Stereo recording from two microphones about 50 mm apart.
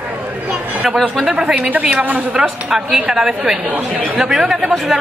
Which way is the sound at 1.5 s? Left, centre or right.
Right.